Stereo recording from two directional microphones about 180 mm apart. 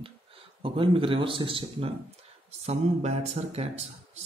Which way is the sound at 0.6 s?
30° right (ahead or behind).